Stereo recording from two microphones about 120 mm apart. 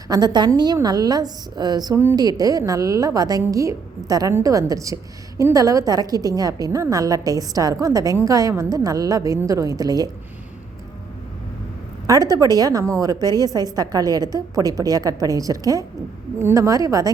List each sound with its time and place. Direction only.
0.1 s a woman's voice: 35° right (ahead or behind)
12.0 s a woman's voice: 30° right (ahead or behind)